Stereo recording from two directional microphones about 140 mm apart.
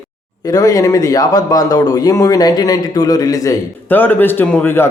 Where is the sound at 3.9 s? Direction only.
15° left (ahead or behind).